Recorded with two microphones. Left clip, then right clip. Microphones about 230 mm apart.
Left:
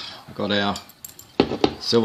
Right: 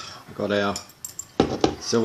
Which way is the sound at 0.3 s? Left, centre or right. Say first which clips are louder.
Left 1 dB; left.